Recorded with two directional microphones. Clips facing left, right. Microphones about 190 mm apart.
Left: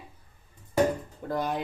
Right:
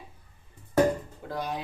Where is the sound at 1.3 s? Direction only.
50° left (ahead or behind).